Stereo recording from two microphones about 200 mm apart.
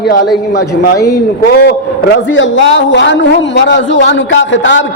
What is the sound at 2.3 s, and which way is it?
A man's voice, 65° left (ahead or behind).